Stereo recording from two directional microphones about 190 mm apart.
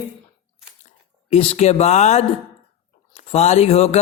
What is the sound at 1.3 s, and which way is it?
A man's voice, 35° left (ahead or behind).